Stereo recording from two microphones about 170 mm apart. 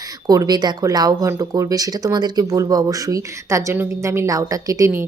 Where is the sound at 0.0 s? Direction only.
20° right (ahead or behind).